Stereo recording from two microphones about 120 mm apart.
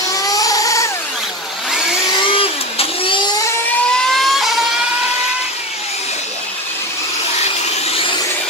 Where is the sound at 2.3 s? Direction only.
50° left (ahead or behind).